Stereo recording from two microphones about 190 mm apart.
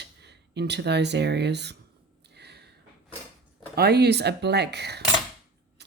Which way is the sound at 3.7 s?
60° right (ahead or behind).